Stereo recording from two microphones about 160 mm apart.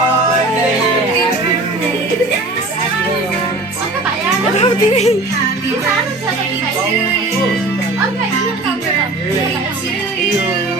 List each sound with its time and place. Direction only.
4.5 s music: 40° left (ahead or behind)